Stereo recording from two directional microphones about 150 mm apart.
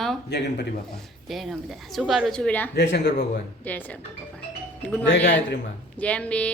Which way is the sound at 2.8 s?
90° left.